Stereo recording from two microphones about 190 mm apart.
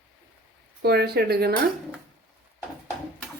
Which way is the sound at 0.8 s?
55° right (ahead or behind).